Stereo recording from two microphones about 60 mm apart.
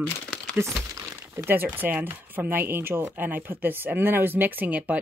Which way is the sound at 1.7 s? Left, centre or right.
Right.